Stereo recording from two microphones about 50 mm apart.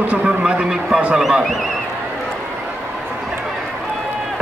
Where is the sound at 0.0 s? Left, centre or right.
Right.